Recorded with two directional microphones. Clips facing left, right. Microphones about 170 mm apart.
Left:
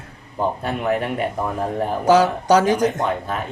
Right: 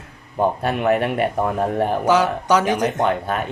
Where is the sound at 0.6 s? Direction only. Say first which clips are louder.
Right 3 dB; 65° right (ahead or behind).